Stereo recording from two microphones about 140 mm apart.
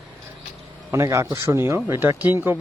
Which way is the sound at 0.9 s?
20° right (ahead or behind).